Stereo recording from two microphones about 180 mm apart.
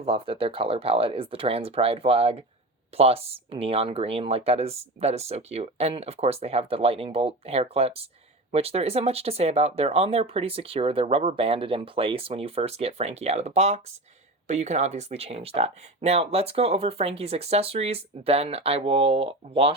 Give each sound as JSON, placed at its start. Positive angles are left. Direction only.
{"t": 0.0, "sound": "speech", "side_deg": -30}